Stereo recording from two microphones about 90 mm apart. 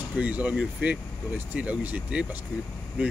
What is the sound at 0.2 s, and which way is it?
Speech, 15° right (ahead or behind).